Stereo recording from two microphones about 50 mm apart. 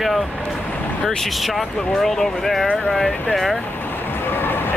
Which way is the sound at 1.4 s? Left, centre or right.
Centre.